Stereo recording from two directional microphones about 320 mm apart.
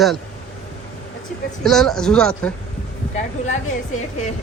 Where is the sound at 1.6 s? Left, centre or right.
Centre.